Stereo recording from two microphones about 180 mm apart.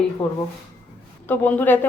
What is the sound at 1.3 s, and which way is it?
Speech, 10° left (ahead or behind).